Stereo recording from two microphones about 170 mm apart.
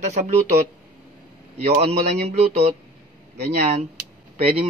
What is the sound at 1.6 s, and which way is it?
Speech, 40° right (ahead or behind).